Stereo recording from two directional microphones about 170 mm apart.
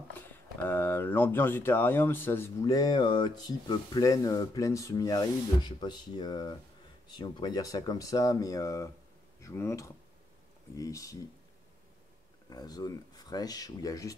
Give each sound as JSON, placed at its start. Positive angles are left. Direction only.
{"t": 0.3, "sound": "speech", "side_deg": 10}
{"t": 12.4, "sound": "speech", "side_deg": 25}